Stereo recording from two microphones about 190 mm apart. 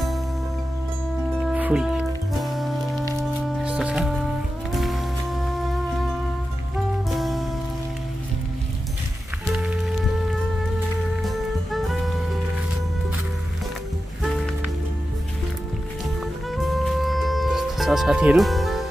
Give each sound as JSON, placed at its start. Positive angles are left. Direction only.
{"t": 1.3, "sound": "music", "side_deg": -5}
{"t": 7.1, "sound": "music", "side_deg": 0}
{"t": 11.2, "sound": "music", "side_deg": 0}
{"t": 14.2, "sound": "music", "side_deg": 0}
{"t": 16.5, "sound": "music", "side_deg": 0}